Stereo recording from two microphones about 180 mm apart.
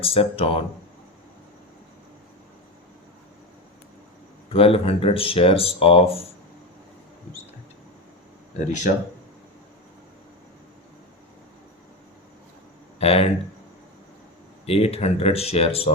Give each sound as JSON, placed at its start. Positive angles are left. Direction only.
{"t": 0.0, "sound": "speech", "side_deg": 30}
{"t": 4.4, "sound": "speech", "side_deg": 30}
{"t": 8.5, "sound": "speech", "side_deg": 45}
{"t": 13.0, "sound": "speech", "side_deg": 35}
{"t": 14.7, "sound": "speech", "side_deg": 35}